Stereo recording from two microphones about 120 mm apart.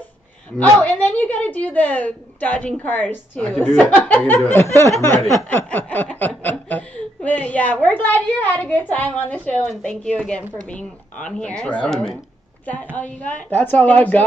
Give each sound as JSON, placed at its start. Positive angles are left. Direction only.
{"t": 0.6, "sound": "speech", "side_deg": 10}